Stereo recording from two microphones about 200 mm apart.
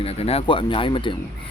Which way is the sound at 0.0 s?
30° left (ahead or behind).